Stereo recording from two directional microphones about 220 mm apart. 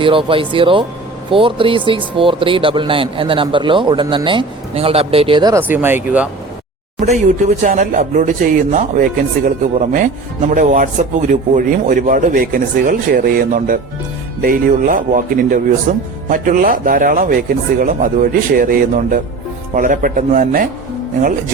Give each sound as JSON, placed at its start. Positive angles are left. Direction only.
{"t": 0.0, "sound": "speech", "side_deg": -25}
{"t": 7.0, "sound": "speech", "side_deg": -30}